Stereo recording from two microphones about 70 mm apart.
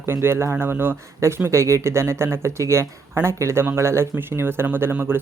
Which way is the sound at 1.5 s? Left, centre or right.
Right.